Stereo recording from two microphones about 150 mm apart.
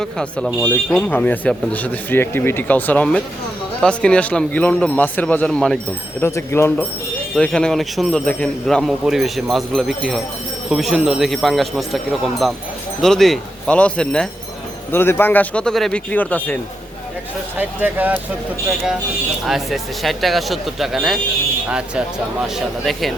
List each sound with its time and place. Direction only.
0.0 s speech: 5° left (ahead or behind)
6.2 s speech: 15° left (ahead or behind)
17.6 s speech: 10° right (ahead or behind)
19.5 s speech: centre (ahead or behind)